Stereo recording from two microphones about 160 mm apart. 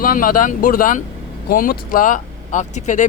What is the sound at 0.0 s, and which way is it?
Speech, 60° left (ahead or behind).